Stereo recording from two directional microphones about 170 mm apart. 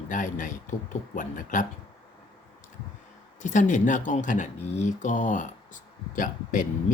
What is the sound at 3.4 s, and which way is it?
Speech, 45° left (ahead or behind).